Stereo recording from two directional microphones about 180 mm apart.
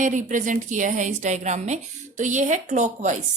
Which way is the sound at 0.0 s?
45° right (ahead or behind).